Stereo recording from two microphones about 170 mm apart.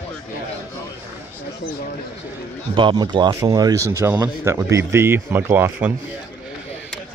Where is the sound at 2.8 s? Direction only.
25° right (ahead or behind); by 5.9 s 10° right (ahead or behind).